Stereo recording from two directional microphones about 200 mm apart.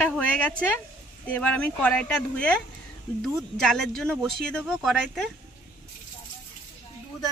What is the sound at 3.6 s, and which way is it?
Speech, centre (ahead or behind).